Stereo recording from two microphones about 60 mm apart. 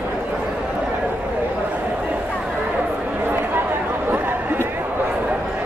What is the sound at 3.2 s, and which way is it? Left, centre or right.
Chatter, right.